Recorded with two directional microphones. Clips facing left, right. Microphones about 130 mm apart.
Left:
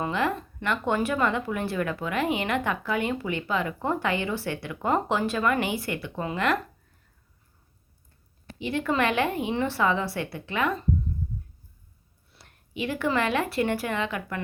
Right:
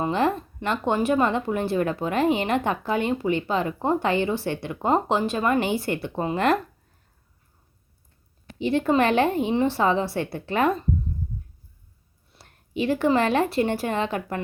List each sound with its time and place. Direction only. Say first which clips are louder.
0.0 s a woman's voice: right 4 dB; 30° right (ahead or behind)
8.5 s a woman's voice: right 5 dB; 35° right (ahead or behind)
12.4 s speech: right 5 dB; 35° right (ahead or behind)